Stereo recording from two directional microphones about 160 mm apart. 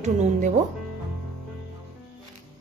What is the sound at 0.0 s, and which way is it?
Speech, 45° right (ahead or behind).